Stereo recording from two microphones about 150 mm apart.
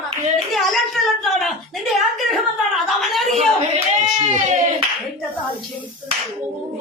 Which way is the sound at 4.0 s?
50° right (ahead or behind).